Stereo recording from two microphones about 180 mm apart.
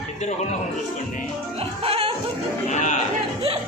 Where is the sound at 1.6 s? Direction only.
30° right (ahead or behind).